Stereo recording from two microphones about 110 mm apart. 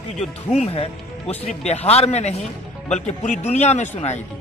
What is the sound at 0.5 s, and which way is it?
Speech, 70° left (ahead or behind).